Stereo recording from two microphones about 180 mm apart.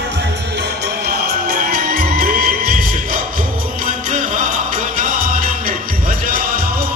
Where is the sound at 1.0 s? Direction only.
60° right (ahead or behind).